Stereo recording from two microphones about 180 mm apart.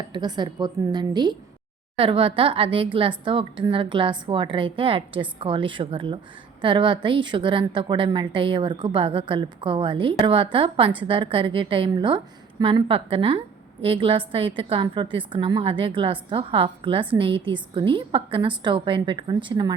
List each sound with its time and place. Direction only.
0.1 s a woman's voice: 25° right (ahead or behind)